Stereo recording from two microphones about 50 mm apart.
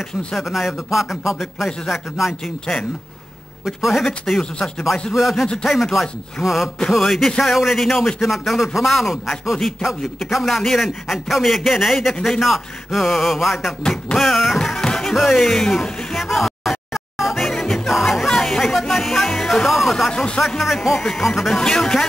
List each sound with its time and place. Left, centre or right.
0.4 s a man's voice: centre
3.6 s a man's voice: centre
14.6 s music: centre
15.1 s music: centre
20.1 s speech: centre
20.4 s a man's voice: centre